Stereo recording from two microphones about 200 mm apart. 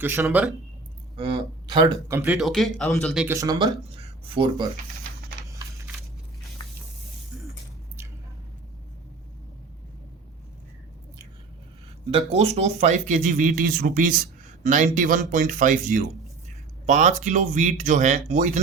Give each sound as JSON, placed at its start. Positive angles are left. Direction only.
{"t": 0.0, "sound": "speech", "side_deg": -10}
{"t": 1.1, "sound": "speech", "side_deg": -25}
{"t": 3.2, "sound": "speech", "side_deg": -15}
{"t": 5.5, "sound": "a sound", "side_deg": -15}
{"t": 12.1, "sound": "speech", "side_deg": -30}